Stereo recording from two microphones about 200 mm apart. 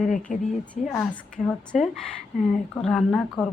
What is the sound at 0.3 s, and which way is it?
Speech, 40° left (ahead or behind).